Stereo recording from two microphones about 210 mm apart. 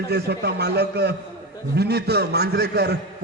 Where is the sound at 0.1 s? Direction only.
50° right (ahead or behind).